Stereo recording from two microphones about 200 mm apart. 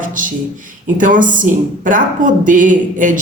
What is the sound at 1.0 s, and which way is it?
Speech, 40° right (ahead or behind).